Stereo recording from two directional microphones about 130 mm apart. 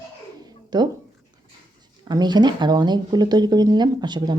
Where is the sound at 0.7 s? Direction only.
30° right (ahead or behind).